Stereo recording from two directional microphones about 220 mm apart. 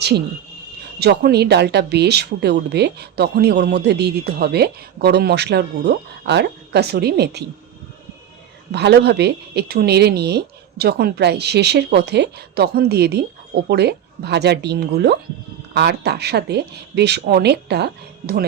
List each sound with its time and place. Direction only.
0.9 s speech: 45° right (ahead or behind)
8.7 s speech: 50° right (ahead or behind)